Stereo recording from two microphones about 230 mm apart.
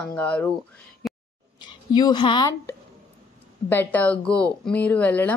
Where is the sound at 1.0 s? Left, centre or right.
Centre.